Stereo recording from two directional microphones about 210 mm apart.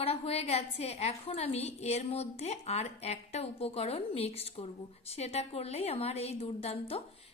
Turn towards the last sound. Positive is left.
turn(degrees=30)  # may be behind; listen again after turning